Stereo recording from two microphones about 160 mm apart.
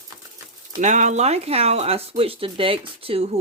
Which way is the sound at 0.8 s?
50° right (ahead or behind).